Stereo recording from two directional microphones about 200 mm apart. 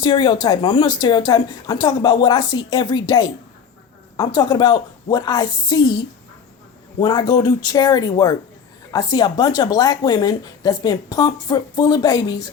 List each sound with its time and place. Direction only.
0.0 s speech: 25° left (ahead or behind)